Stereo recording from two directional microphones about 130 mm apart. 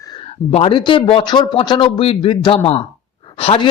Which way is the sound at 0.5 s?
45° left (ahead or behind).